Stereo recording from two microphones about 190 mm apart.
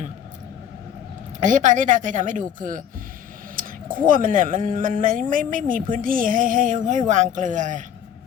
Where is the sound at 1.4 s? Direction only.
40° right (ahead or behind).